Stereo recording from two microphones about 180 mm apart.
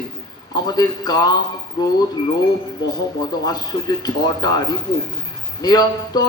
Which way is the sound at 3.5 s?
20° left (ahead or behind).